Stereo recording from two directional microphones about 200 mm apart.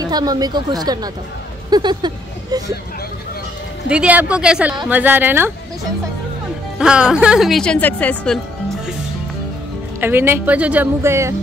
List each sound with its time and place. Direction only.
0.0 s speech: 20° right (ahead or behind)
3.9 s speech: 5° right (ahead or behind)
6.8 s speech: 5° right (ahead or behind)
9.9 s speech: 10° right (ahead or behind)